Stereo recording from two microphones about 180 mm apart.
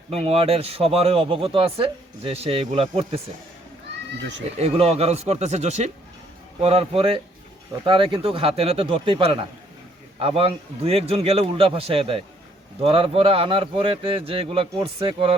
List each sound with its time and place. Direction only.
0.1 s speech: 35° right (ahead or behind)
4.5 s speech: 35° right (ahead or behind)